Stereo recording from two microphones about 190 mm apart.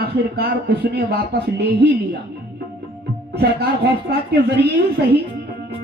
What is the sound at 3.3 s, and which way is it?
Speech, 60° right (ahead or behind).